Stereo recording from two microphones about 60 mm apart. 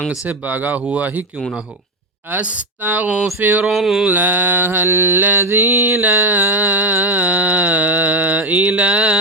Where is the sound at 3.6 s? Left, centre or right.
Centre.